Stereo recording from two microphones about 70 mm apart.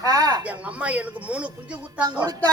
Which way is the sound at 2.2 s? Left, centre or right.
Right.